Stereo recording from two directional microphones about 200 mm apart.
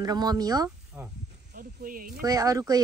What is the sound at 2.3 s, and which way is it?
Speech, 15° right (ahead or behind).